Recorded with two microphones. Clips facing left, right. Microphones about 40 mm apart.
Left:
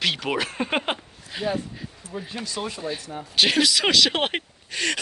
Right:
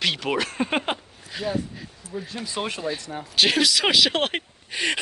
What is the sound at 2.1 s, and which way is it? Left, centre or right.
Speech, left.